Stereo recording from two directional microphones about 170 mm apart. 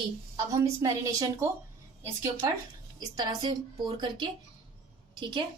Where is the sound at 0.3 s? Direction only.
20° right (ahead or behind).